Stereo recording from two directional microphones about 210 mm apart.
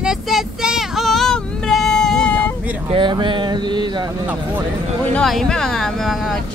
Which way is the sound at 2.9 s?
25° right (ahead or behind).